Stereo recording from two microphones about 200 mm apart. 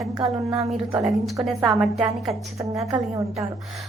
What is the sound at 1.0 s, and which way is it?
A woman's voice, centre (ahead or behind).